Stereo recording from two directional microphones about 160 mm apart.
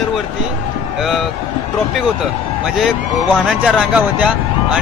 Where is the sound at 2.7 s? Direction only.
5° right (ahead or behind).